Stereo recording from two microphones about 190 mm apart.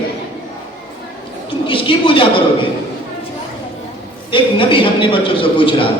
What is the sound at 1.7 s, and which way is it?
Speech, 25° left (ahead or behind).